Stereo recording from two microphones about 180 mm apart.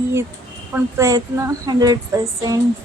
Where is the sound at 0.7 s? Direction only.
15° right (ahead or behind).